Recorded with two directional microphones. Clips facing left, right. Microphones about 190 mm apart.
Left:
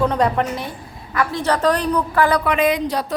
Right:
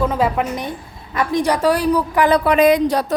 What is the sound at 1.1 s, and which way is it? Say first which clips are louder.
A woman's voice: right 2 dB; 20° right (ahead or behind).